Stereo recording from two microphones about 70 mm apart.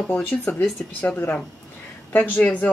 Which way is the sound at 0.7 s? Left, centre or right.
Left.